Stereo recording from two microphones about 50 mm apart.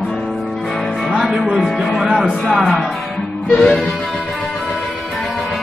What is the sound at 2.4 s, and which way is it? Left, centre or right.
Music, centre.